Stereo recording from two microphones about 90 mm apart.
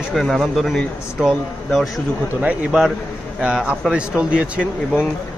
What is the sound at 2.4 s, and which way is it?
A man's voice, 10° right (ahead or behind).